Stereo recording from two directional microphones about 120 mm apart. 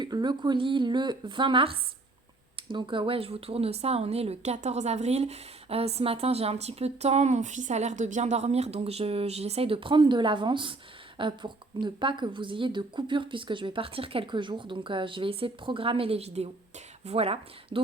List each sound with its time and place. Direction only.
0.0 s a woman's voice: 40° right (ahead or behind)